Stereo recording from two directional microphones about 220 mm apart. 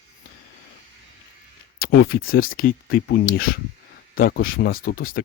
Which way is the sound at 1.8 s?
45° left (ahead or behind).